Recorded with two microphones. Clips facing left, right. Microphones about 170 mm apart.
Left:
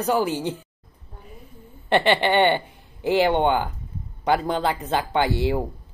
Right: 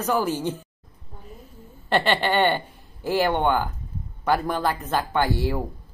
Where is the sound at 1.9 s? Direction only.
15° left (ahead or behind).